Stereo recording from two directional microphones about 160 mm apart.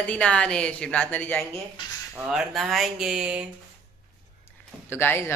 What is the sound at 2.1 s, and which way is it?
Speech, 5° right (ahead or behind).